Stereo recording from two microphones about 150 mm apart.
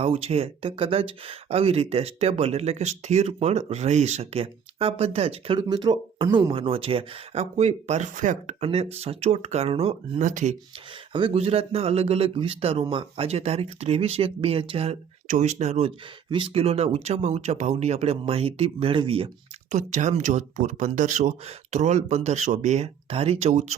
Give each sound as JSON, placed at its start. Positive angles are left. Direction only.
{"t": 0.0, "sound": "speech", "side_deg": -40}
{"t": 8.6, "sound": "speech", "side_deg": -40}
{"t": 10.2, "sound": "speech", "side_deg": -55}
{"t": 11.1, "sound": "speech", "side_deg": -40}
{"t": 19.7, "sound": "speech", "side_deg": -50}